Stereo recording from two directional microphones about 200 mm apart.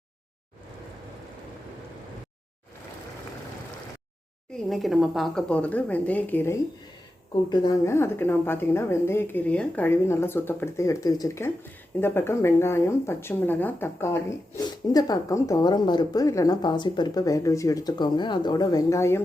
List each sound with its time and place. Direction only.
4.5 s speech: centre (ahead or behind)